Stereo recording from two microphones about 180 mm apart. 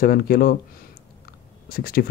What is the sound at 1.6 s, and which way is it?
Speech, 55° left (ahead or behind).